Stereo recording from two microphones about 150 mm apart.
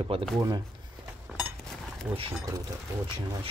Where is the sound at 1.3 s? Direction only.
5° right (ahead or behind).